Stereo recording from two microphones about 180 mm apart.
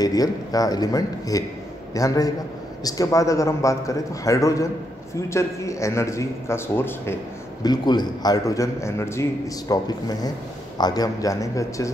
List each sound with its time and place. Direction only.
0.0 s a man's voice: 20° left (ahead or behind)
7.6 s a man's voice: 25° left (ahead or behind)